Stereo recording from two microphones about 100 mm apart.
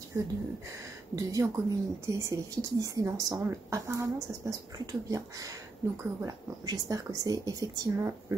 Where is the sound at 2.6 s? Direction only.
35° right (ahead or behind).